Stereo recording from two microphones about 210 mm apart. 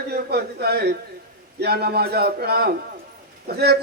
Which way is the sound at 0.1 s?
50° right (ahead or behind).